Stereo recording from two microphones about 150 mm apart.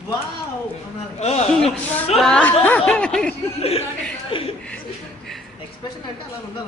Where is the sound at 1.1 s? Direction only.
45° left (ahead or behind).